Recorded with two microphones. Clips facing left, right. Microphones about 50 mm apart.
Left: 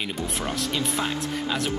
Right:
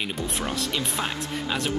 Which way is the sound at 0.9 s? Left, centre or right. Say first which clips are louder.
Left 2 dB; centre.